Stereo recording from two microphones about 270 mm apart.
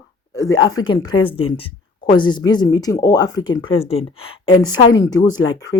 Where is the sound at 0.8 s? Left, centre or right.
Centre.